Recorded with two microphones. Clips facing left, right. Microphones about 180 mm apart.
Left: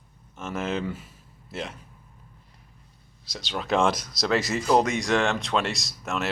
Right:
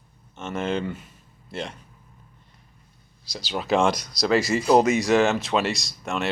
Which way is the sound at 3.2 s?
Centre (ahead or behind).